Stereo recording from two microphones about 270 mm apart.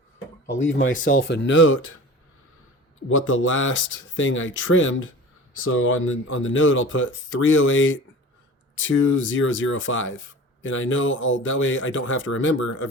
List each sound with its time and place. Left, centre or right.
0.9 s speech: left
1.2 s speech: left
3.1 s speech: left